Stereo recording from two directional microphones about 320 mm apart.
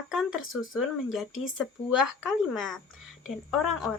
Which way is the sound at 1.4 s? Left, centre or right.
Centre.